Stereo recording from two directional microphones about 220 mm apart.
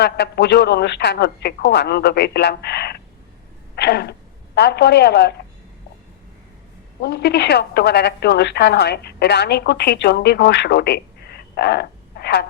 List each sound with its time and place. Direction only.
0.0 s a woman's voice: 50° left (ahead or behind)
3.8 s a sound: 50° left (ahead or behind)
4.5 s a woman's voice: 50° left (ahead or behind)
7.0 s a woman's voice: 50° left (ahead or behind)